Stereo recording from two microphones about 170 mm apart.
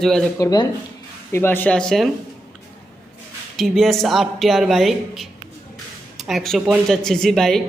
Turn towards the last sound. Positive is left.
turn(degrees=0)  # may be behind; listen again after turning